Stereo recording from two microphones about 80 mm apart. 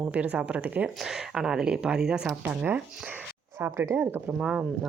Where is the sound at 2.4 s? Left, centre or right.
Centre.